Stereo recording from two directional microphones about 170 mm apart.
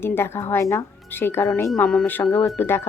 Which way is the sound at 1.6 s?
5° left (ahead or behind).